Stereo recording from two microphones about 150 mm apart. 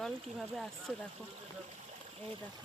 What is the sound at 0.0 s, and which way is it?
Speech, centre (ahead or behind).